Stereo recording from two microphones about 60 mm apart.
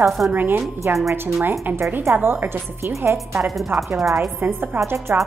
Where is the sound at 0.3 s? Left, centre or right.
Right.